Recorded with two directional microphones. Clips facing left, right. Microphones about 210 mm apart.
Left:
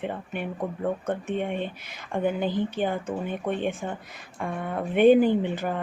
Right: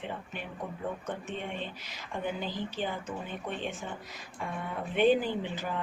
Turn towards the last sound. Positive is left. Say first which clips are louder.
# left 8 dB
turn(degrees=55)  # may be behind; listen again after turning